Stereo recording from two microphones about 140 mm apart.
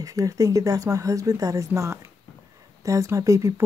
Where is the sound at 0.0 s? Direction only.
25° right (ahead or behind).